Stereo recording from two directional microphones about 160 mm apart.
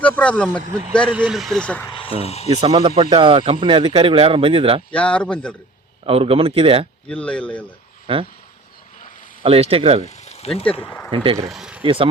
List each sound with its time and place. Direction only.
0.0 s speech: 10° left (ahead or behind)
1.1 s speech: 5° right (ahead or behind)
1.9 s speech: 35° left (ahead or behind)
2.5 s speech: 40° right (ahead or behind)
4.9 s speech: 5° left (ahead or behind)
6.1 s speech: 35° right (ahead or behind)
7.1 s speech: 5° left (ahead or behind)
8.0 s speech: 35° right (ahead or behind)
9.4 s speech: 35° right (ahead or behind)
10.1 s a sound: 45° left (ahead or behind)
10.5 s speech: 5° left (ahead or behind)
11.1 s speech: 30° right (ahead or behind)
11.4 s speech: 5° right (ahead or behind)
11.8 s speech: 35° right (ahead or behind)